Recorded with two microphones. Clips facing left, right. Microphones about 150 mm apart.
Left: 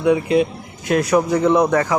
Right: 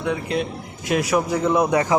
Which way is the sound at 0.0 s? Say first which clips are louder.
Left 8 dB; 5° left (ahead or behind).